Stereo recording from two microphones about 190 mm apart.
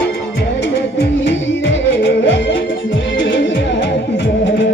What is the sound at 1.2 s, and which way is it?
Music, 70° left (ahead or behind).